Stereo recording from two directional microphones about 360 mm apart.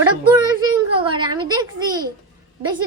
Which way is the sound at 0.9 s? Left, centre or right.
Centre.